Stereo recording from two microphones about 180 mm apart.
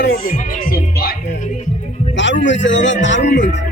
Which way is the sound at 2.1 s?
85° left.